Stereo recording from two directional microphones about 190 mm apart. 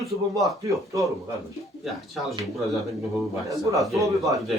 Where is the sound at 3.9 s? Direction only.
15° right (ahead or behind).